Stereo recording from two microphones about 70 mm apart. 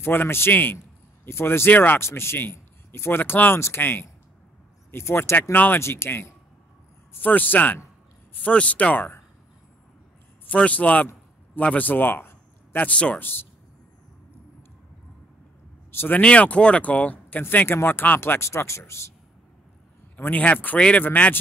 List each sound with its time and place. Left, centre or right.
0.0 s a man's voice: left
7.2 s speech: left
10.4 s speech: centre
12.7 s speech: centre
16.1 s speech: centre; by 19.1 s left
20.2 s speech: left